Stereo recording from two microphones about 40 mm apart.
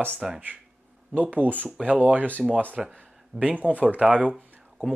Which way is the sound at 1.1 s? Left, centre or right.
Right.